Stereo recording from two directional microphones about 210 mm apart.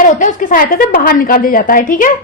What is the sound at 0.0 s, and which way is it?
A woman's voice, 40° left (ahead or behind).